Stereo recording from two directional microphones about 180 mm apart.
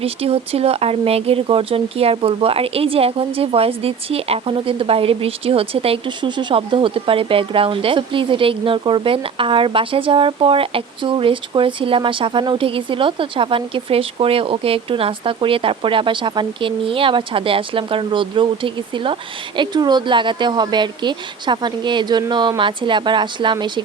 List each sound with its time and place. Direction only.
0.0 s speech: 35° right (ahead or behind)